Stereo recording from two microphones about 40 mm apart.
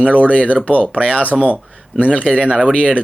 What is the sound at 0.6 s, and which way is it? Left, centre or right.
Speech, left.